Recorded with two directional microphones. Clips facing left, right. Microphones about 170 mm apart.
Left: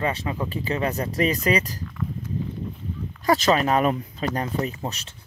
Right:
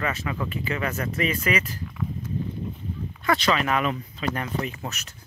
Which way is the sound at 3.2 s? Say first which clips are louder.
Left 4 dB; 40° left (ahead or behind).